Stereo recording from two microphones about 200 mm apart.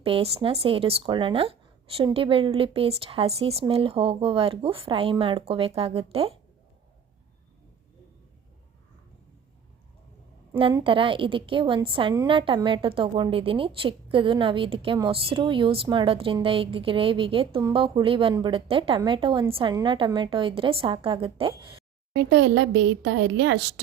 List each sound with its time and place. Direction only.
0.0 s a woman's voice: 30° right (ahead or behind)
10.6 s a woman's voice: 25° right (ahead or behind)
22.1 s speech: 60° right (ahead or behind)